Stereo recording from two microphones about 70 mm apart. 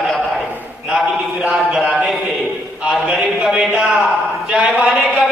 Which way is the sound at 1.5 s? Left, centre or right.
Centre.